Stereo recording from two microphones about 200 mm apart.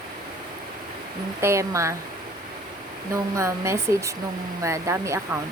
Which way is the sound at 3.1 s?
15° right (ahead or behind).